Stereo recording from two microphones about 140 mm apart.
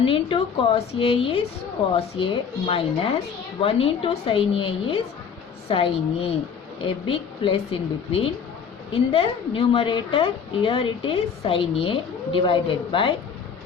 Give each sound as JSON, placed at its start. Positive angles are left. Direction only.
{"t": 0.0, "sound": "a woman's voice", "side_deg": 40}